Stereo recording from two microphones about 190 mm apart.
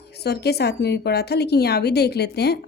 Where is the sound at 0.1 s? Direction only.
60° left (ahead or behind).